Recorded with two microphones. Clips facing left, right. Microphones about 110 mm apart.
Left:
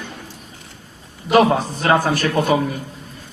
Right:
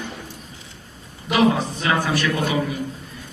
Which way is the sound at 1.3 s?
45° left (ahead or behind).